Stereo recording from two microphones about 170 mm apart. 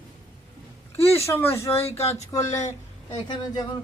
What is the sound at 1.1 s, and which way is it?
Speech, 15° left (ahead or behind).